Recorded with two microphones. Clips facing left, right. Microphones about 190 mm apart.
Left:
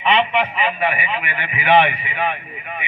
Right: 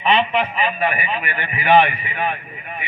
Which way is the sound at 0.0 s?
35° right (ahead or behind).